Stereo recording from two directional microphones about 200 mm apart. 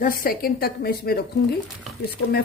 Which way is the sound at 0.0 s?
45° left (ahead or behind).